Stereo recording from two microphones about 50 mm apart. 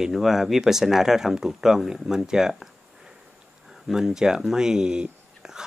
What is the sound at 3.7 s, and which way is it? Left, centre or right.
Speech, centre.